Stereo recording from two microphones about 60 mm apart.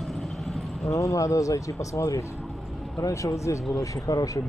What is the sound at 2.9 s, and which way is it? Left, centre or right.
Speech, left.